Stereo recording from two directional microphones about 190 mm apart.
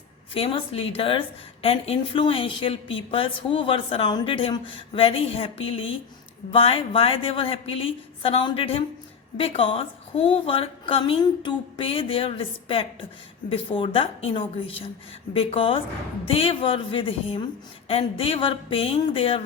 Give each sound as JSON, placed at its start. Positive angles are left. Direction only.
{"t": 0.3, "sound": "a woman's voice", "side_deg": 30}